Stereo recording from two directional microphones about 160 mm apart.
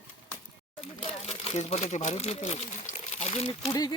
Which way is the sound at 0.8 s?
35° left (ahead or behind).